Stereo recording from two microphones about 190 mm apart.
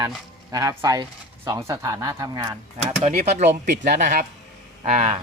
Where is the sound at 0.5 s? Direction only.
20° right (ahead or behind).